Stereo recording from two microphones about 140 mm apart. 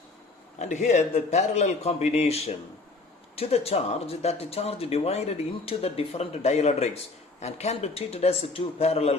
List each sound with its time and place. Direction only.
0.6 s speech: 55° left (ahead or behind)